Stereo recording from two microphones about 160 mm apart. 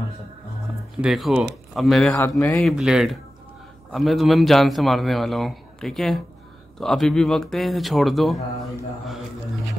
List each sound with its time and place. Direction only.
1.0 s a man's voice: 5° right (ahead or behind)
2.1 s a man's voice: 20° left (ahead or behind)
2.5 s a man's voice: centre (ahead or behind)